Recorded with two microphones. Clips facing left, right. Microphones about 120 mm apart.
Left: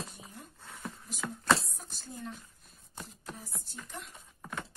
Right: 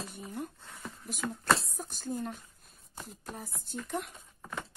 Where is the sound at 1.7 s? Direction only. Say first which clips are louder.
Right 10 dB; 50° right (ahead or behind).